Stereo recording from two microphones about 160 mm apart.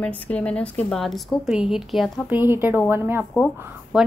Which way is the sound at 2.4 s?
15° right (ahead or behind).